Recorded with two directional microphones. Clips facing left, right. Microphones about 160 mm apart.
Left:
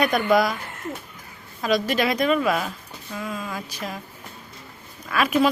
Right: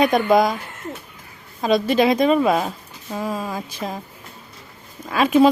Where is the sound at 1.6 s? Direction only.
25° right (ahead or behind).